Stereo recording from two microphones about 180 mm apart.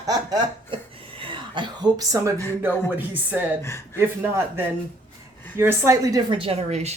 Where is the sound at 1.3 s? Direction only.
25° right (ahead or behind).